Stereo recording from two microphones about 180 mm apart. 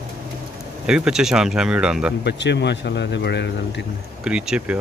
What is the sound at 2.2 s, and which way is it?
Speech, 70° left (ahead or behind).